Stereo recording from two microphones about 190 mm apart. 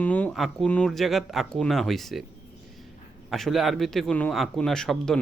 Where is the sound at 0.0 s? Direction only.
5° left (ahead or behind).